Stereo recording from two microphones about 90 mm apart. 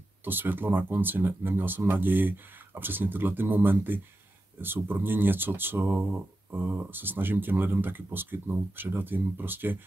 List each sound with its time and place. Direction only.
0.2 s speech: 25° right (ahead or behind)